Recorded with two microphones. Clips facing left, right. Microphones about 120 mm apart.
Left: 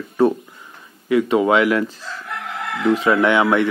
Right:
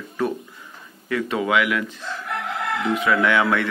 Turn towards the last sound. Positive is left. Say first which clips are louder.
# left 4 dB
turn(degrees=20)  # may be behind; listen again after turning